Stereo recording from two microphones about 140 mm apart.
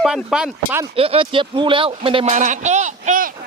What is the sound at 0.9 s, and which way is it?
Speech, 40° right (ahead or behind).